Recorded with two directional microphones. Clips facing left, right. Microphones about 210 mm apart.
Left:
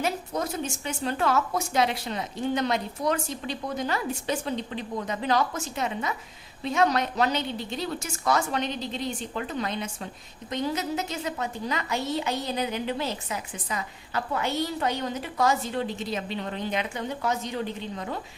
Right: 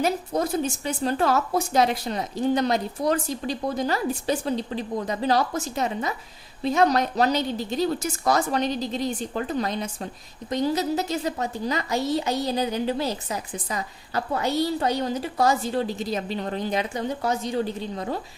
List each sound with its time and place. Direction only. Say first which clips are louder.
0.0 s a woman's voice: right 5 dB; 35° right (ahead or behind)